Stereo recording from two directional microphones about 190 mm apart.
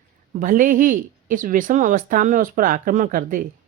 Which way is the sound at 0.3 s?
45° right (ahead or behind).